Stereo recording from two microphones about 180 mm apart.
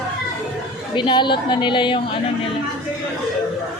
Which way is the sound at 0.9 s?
25° left (ahead or behind).